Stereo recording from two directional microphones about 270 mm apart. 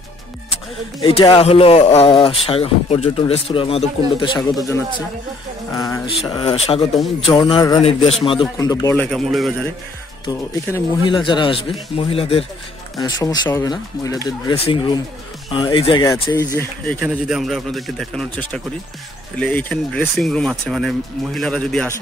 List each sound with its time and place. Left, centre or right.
1.0 s speech: centre
6.2 s speech: centre
10.2 s speech: centre